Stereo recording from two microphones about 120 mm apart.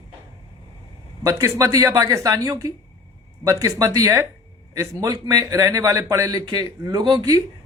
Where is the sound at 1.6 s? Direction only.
25° right (ahead or behind).